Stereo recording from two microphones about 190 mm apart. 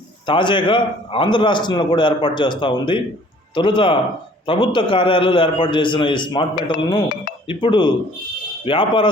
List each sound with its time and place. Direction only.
0.3 s a man's voice: 25° left (ahead or behind)